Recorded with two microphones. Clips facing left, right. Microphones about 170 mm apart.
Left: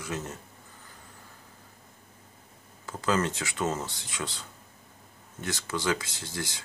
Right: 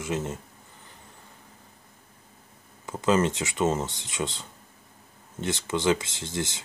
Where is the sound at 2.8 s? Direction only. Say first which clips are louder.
Right 5 dB; 20° right (ahead or behind).